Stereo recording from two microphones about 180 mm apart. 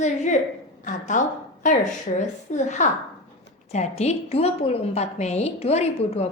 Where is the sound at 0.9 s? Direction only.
45° left (ahead or behind).